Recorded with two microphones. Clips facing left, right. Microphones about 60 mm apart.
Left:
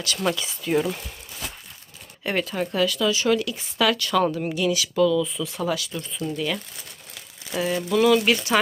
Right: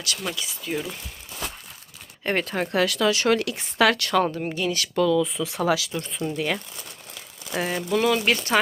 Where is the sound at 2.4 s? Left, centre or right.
Right.